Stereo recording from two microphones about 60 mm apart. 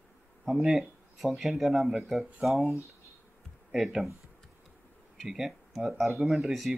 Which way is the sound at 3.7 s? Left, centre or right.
Centre.